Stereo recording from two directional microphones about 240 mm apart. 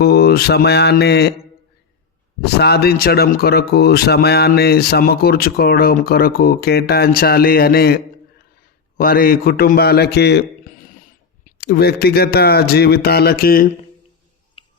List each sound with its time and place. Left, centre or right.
0.0 s speech: left
2.4 s speech: left
9.0 s a man's voice: left